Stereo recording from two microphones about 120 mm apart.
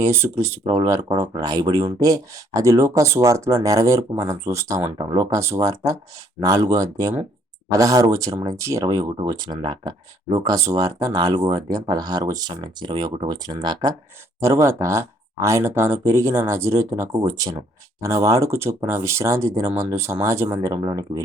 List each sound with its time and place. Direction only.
0.0 s speech: 20° right (ahead or behind)
14.4 s speech: 25° right (ahead or behind)